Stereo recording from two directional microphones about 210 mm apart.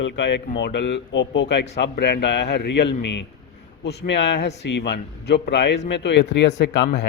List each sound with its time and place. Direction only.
0.0 s a man's voice: 55° left (ahead or behind)